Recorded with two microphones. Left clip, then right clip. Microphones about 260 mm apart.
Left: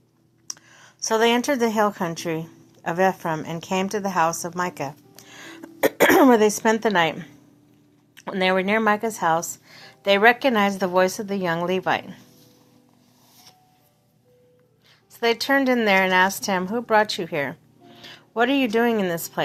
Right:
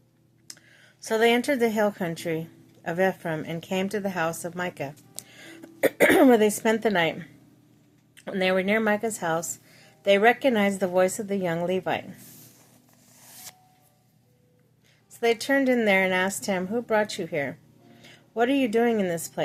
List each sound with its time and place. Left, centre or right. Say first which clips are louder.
0.4 s a sound: left 9 dB; centre
1.0 s a woman's voice: left 2 dB; centre
15.2 s a woman's voice: left 3 dB; centre